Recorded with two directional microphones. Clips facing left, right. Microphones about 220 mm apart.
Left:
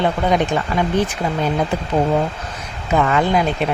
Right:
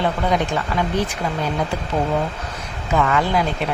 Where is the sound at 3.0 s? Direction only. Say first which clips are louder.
Left 2 dB; 25° left (ahead or behind).